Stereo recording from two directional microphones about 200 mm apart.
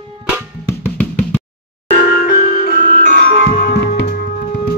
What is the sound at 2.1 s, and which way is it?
Music, 50° left (ahead or behind).